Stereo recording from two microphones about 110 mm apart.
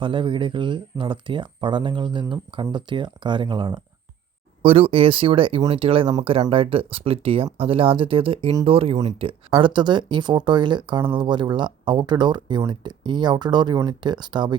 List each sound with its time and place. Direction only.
0.0 s speech: 50° right (ahead or behind)
4.6 s speech: 60° right (ahead or behind); by 14.6 s 45° right (ahead or behind)